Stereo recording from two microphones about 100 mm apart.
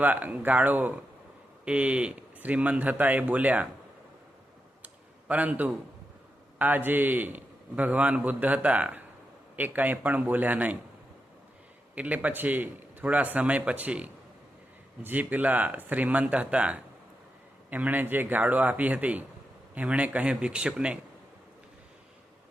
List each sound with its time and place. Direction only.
0.0 s a man's voice: 15° right (ahead or behind)
5.3 s a man's voice: 15° right (ahead or behind)
11.9 s a man's voice: 15° right (ahead or behind)